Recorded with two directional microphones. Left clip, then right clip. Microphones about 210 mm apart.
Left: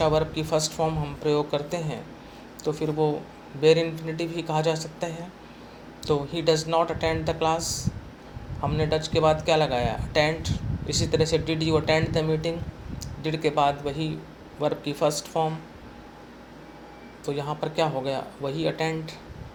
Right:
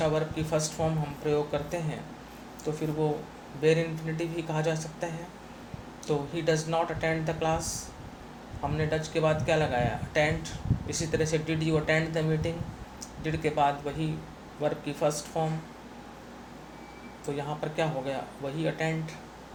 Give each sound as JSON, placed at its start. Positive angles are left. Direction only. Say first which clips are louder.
{"t": 0.0, "sound": "speech", "louder": "left 5 dB", "side_deg": 40}
{"t": 8.7, "sound": "speech", "louder": "left 5 dB", "side_deg": 35}
{"t": 17.2, "sound": "speech", "louder": "left 4 dB", "side_deg": 35}